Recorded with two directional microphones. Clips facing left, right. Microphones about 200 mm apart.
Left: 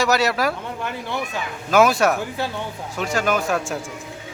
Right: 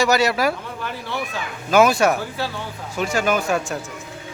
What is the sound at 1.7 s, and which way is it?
Speech, centre (ahead or behind).